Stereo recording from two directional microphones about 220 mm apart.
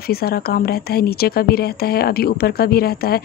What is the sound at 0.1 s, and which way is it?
A woman's voice, 45° left (ahead or behind).